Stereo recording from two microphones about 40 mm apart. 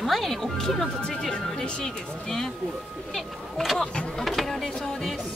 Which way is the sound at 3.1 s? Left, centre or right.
Centre.